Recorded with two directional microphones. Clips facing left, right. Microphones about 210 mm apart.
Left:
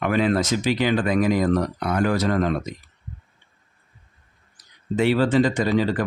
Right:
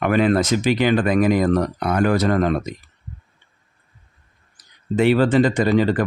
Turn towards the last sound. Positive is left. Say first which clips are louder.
# right 4 dB
turn(degrees=-60)  # may be behind; listen again after turning